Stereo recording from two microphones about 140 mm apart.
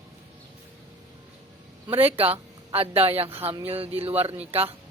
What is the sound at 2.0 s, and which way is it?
Speech, 45° right (ahead or behind).